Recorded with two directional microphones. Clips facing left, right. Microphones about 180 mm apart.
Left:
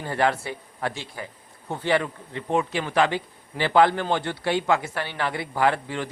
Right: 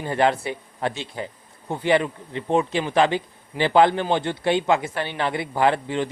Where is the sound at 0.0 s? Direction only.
20° right (ahead or behind).